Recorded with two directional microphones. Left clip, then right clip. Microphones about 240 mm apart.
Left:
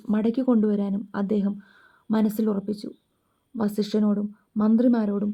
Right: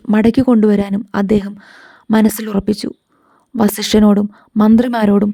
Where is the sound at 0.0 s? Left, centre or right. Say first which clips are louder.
Right 12 dB; right.